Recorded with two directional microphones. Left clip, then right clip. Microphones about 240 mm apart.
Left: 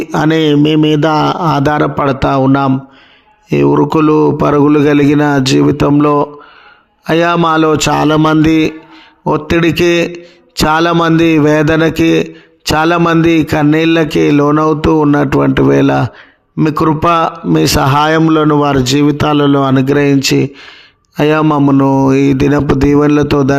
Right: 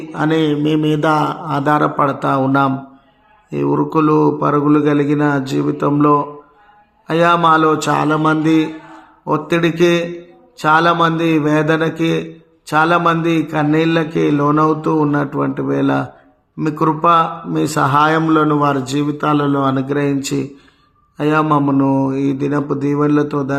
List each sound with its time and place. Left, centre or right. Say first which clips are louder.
0.1 s a man's voice: left 5 dB; left